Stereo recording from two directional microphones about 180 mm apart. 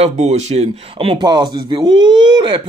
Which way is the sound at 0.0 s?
35° right (ahead or behind).